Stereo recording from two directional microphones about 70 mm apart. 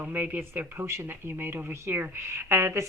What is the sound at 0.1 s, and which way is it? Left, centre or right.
A woman's voice, right.